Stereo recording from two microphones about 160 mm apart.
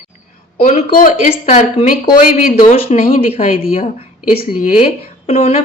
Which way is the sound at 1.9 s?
60° left (ahead or behind).